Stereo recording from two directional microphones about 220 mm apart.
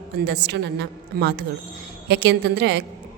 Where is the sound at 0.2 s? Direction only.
50° right (ahead or behind).